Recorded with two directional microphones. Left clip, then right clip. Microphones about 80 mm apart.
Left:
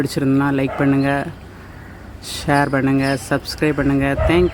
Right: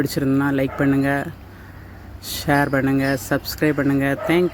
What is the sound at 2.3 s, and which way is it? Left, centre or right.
Speech, right.